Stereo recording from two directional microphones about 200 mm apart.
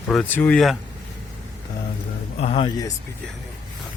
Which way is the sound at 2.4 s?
30° left (ahead or behind).